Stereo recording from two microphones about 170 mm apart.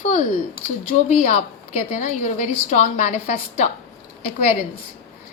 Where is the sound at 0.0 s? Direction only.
50° left (ahead or behind).